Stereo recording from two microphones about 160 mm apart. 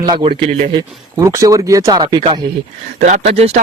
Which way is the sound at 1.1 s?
20° right (ahead or behind).